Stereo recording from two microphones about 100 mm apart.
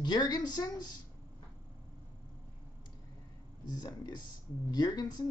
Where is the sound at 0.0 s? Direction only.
45° left (ahead or behind).